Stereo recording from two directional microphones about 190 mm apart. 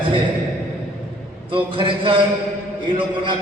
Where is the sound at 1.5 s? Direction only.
25° right (ahead or behind).